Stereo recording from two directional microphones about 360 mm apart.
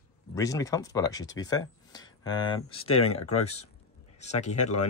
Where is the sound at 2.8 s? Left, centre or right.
Left.